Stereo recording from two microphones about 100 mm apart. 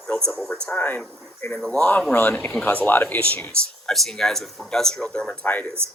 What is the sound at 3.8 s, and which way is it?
Speech, 5° left (ahead or behind).